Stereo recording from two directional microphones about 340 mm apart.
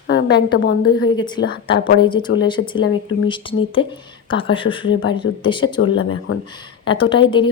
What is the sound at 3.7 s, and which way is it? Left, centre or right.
Speech, centre.